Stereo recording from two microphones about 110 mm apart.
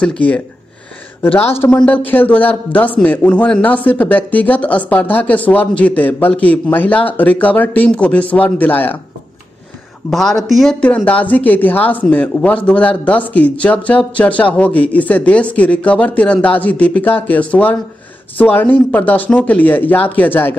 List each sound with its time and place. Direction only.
1.5 s a man's voice: 20° left (ahead or behind)
10.1 s speech: 5° left (ahead or behind)
11.1 s a man's voice: 15° left (ahead or behind)